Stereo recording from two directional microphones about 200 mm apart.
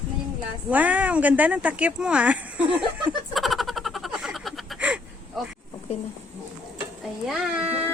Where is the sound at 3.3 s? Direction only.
Centre (ahead or behind).